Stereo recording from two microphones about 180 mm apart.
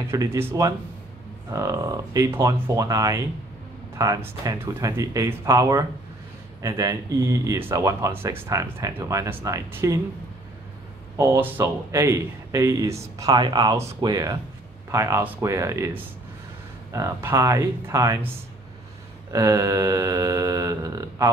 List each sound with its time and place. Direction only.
0.1 s speech: 15° right (ahead or behind)
11.1 s speech: 15° right (ahead or behind)
19.3 s speech: 15° right (ahead or behind)